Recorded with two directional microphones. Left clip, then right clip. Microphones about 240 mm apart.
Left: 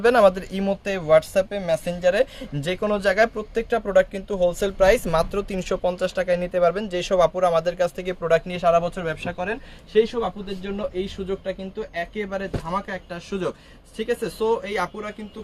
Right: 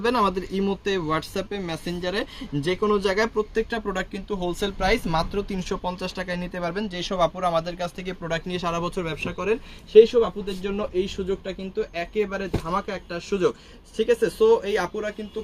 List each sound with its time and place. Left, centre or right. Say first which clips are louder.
0.0 s speech: left 6 dB; left
8.8 s speech: left 1 dB; centre
13.9 s speech: right 4 dB; centre